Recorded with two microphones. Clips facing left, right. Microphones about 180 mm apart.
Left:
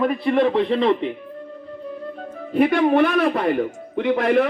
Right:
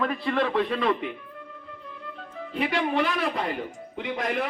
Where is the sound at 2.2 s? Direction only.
50° left (ahead or behind).